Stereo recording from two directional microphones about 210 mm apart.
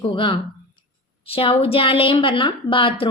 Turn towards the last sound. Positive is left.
turn(degrees=25)  # may be behind; listen again after turning